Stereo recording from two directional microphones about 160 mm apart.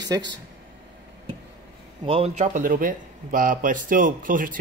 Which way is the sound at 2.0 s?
40° right (ahead or behind).